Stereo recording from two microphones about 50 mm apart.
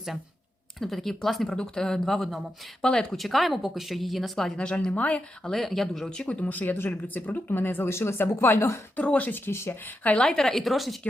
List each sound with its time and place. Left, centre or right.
0.8 s speech: centre
2.8 s speech: centre
3.2 s speech: centre
4.9 s speech: left
5.4 s speech: centre
6.1 s speech: left
6.5 s speech: left
7.9 s speech: left
9.0 s speech: left
9.5 s speech: left
9.8 s speech: left
10.3 s speech: centre